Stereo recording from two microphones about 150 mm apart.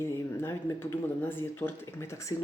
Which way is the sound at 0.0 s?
15° left (ahead or behind).